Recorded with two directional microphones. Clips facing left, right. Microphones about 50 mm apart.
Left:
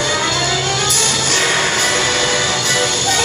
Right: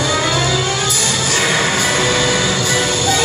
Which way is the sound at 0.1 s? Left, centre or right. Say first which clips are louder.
Right 1 dB; right.